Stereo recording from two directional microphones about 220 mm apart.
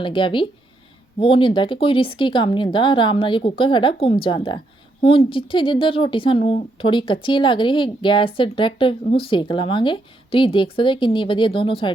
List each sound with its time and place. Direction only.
0.0 s a woman's voice: 20° left (ahead or behind)